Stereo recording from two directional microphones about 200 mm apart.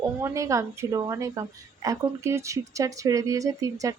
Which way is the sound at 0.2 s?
15° right (ahead or behind).